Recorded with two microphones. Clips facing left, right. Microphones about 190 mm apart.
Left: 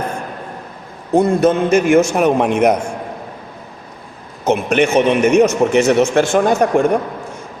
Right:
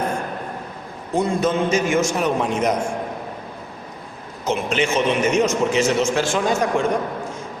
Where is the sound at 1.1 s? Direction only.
55° left (ahead or behind).